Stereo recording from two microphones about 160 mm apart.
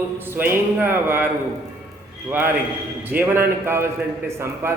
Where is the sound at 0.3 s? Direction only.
15° right (ahead or behind).